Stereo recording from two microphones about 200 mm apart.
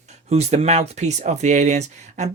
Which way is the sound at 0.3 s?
30° right (ahead or behind).